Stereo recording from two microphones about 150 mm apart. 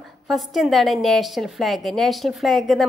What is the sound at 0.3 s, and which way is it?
A woman's voice, centre (ahead or behind).